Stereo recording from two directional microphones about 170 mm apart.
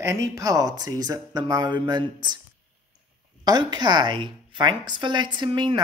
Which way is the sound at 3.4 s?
25° right (ahead or behind).